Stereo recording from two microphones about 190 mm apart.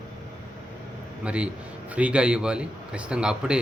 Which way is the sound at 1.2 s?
5° right (ahead or behind).